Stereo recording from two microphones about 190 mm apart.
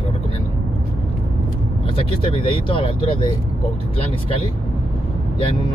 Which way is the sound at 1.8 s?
30° left (ahead or behind).